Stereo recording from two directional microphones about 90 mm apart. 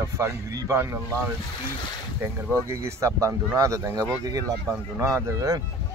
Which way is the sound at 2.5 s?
30° right (ahead or behind).